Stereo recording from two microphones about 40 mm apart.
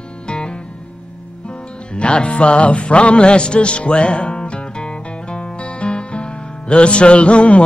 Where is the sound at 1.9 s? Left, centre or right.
Left.